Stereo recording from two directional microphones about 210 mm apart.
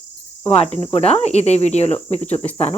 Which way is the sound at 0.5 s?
25° left (ahead or behind).